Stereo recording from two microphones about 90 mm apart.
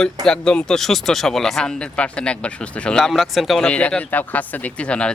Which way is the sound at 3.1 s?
Centre (ahead or behind).